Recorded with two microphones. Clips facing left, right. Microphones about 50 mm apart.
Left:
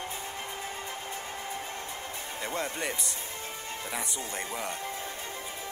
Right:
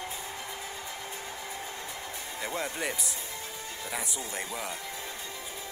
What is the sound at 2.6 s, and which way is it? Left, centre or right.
Speech, centre.